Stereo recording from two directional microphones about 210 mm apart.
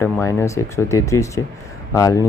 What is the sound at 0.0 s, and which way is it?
Speech, 15° left (ahead or behind).